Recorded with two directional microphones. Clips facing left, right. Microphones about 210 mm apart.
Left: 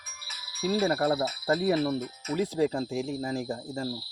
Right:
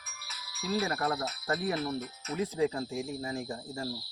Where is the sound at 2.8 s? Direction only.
80° left.